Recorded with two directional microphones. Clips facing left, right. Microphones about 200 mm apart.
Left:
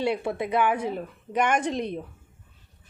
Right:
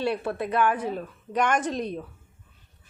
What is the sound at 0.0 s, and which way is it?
A woman's voice, 15° left (ahead or behind).